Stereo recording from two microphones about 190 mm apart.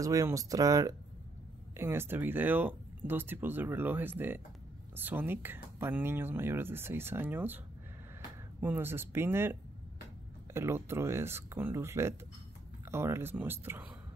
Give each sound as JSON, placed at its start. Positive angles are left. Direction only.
{"t": 0.0, "sound": "speech", "side_deg": -15}